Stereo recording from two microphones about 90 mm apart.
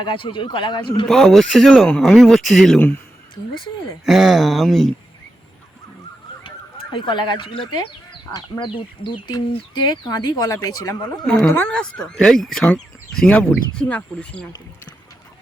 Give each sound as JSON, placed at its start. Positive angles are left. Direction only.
{"t": 0.0, "sound": "a man's voice", "side_deg": 65}
{"t": 1.0, "sound": "speech", "side_deg": 5}
{"t": 4.0, "sound": "speech", "side_deg": 0}
{"t": 6.9, "sound": "a man's voice", "side_deg": 60}
{"t": 9.2, "sound": "speech", "side_deg": 55}
{"t": 11.5, "sound": "speech", "side_deg": 15}